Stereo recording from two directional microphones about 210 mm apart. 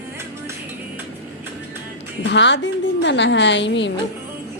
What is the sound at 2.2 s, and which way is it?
A woman's voice, 55° left (ahead or behind).